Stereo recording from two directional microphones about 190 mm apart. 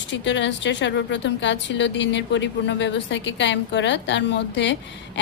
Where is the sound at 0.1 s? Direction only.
70° left (ahead or behind).